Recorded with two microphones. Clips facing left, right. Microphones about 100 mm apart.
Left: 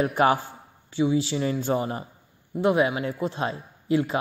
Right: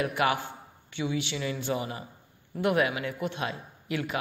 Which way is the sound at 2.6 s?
25° left (ahead or behind).